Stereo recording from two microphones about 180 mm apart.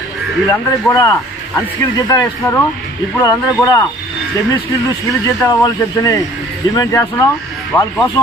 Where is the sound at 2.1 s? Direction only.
20° left (ahead or behind).